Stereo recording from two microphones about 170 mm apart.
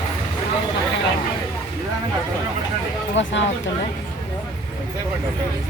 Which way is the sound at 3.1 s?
90° left.